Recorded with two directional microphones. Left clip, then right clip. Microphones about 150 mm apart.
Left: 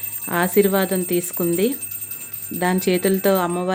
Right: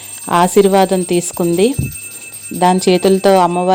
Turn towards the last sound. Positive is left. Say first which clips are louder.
# right 9 dB
turn(degrees=-30)  # may be behind; listen again after turning